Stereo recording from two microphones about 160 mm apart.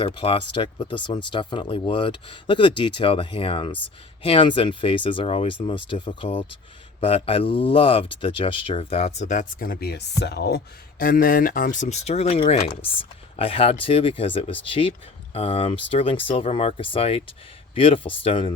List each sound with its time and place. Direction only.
0.0 s speech: 35° left (ahead or behind)